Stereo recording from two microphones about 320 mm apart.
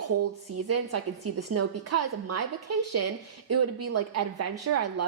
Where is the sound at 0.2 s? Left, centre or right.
Right.